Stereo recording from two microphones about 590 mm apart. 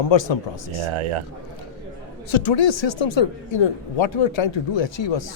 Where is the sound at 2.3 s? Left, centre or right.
Left.